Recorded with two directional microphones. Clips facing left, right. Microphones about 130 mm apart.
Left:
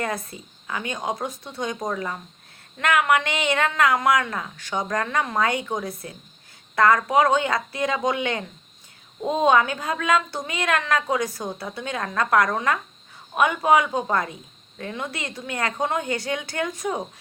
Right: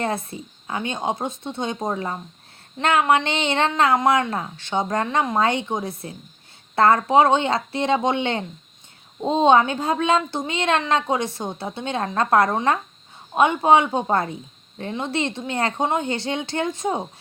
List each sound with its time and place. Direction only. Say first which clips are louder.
0.0 s a woman's voice: right 3 dB; 25° right (ahead or behind)